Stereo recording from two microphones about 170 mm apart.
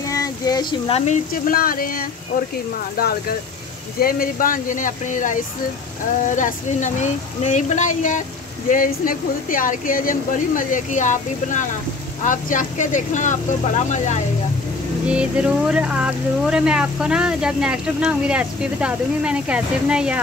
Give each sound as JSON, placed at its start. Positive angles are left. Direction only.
{"t": 0.1, "sound": "speech", "side_deg": 20}
{"t": 15.0, "sound": "speech", "side_deg": -5}